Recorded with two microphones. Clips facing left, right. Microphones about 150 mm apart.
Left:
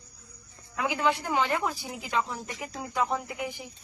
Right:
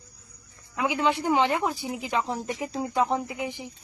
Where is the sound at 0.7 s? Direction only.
20° right (ahead or behind).